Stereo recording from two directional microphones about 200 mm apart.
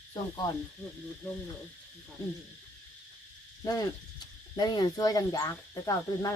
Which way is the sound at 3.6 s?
20° left (ahead or behind).